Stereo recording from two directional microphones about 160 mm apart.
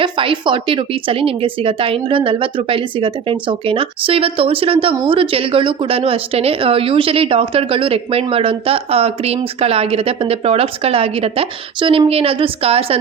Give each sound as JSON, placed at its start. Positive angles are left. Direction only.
{"t": 0.0, "sound": "a woman's voice", "side_deg": -30}